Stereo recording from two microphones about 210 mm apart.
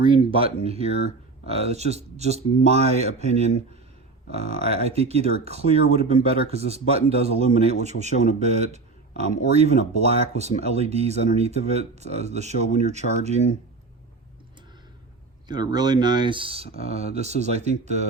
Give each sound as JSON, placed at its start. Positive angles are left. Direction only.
{"t": 0.3, "sound": "speech", "side_deg": -30}
{"t": 15.4, "sound": "speech", "side_deg": -20}